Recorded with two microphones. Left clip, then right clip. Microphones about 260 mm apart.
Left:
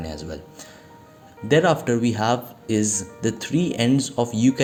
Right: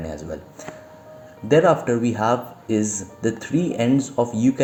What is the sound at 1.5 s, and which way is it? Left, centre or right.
Speech, left.